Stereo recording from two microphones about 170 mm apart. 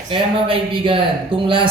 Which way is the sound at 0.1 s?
30° right (ahead or behind).